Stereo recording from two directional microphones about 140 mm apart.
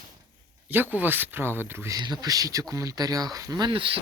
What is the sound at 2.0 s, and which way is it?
Speech, 30° right (ahead or behind).